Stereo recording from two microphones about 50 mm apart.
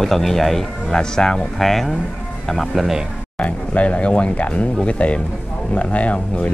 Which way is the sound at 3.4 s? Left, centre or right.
Left.